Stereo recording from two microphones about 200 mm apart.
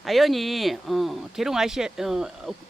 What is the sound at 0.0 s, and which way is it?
Speech, centre (ahead or behind).